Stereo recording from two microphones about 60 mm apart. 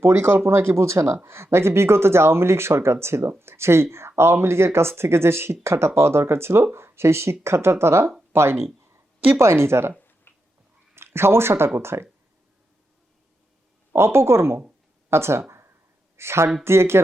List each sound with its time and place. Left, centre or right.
0.0 s speech: right
10.3 s a sound: left
10.9 s speech: right
13.9 s speech: right
15.1 s a sound: right
16.1 s speech: right